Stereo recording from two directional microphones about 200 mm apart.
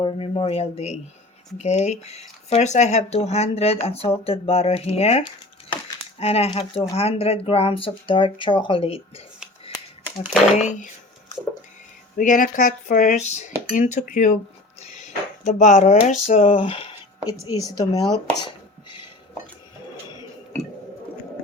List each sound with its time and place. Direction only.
0.0 s speech: 25° left (ahead or behind)
10.6 s speech: 35° left (ahead or behind)
12.1 s speech: 40° left (ahead or behind); by 18.0 s 20° left (ahead or behind)